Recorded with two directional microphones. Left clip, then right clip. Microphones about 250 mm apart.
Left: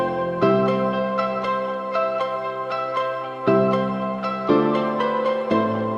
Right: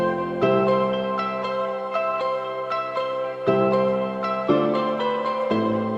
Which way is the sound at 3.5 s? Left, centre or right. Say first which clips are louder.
Left 1 dB; centre.